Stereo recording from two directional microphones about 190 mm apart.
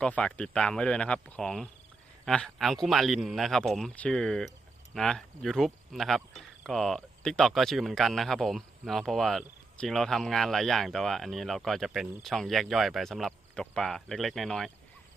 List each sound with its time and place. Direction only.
0.0 s speech: 5° left (ahead or behind)